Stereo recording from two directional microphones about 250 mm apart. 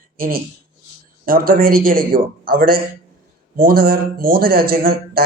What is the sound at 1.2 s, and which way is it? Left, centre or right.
Speech, right.